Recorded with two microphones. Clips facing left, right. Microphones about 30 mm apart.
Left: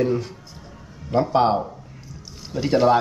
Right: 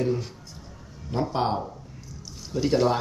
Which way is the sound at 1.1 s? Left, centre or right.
Left.